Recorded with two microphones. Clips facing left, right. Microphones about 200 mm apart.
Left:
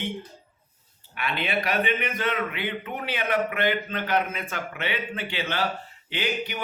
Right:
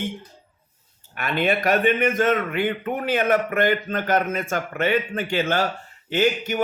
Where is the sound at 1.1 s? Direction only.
45° right (ahead or behind).